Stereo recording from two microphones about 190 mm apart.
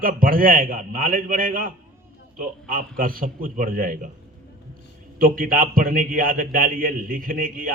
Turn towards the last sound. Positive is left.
turn(degrees=-45)  # may be behind; listen again after turning